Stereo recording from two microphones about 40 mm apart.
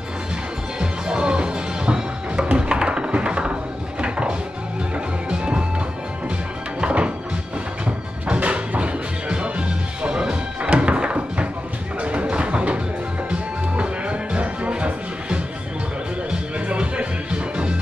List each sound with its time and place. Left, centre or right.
0.7 s music: right
6.8 s music: right
16.6 s music: right